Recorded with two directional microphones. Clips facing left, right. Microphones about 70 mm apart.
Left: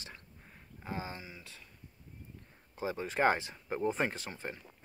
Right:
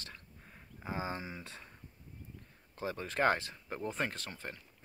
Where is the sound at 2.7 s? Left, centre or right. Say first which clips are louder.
Left 2 dB; centre.